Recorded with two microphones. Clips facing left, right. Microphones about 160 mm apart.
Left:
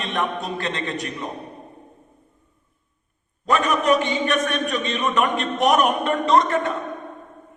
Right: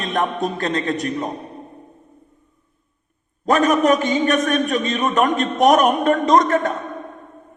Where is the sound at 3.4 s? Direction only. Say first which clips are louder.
Right 4 dB; 40° right (ahead or behind).